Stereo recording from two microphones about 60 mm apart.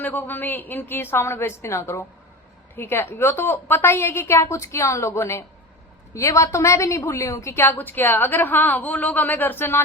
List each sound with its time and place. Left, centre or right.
0.0 s a woman's voice: left
2.7 s a woman's voice: left
7.6 s a woman's voice: left